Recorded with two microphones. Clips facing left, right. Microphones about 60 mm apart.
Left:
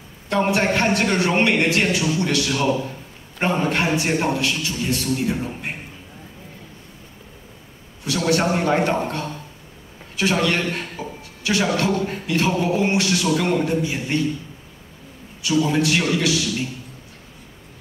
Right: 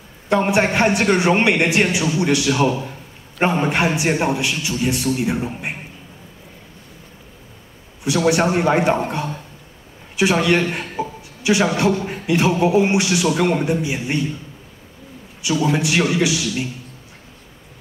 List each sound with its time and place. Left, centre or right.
0.3 s a man's voice: centre
8.3 s a man's voice: centre
15.6 s speech: centre